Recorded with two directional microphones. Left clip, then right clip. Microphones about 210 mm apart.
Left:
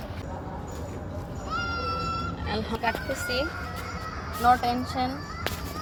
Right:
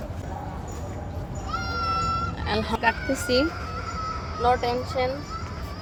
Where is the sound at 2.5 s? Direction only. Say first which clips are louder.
Right 5 dB; 50° right (ahead or behind).